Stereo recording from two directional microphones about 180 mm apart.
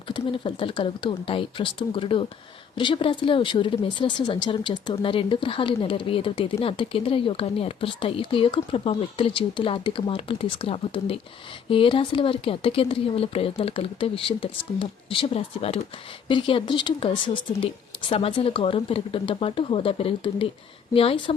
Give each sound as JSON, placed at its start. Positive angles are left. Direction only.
{"t": 0.1, "sound": "speech", "side_deg": 30}